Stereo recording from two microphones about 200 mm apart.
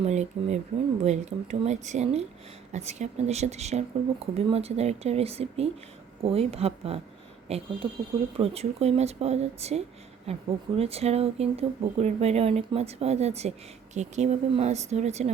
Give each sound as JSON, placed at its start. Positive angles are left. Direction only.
{"t": 0.0, "sound": "speech", "side_deg": -35}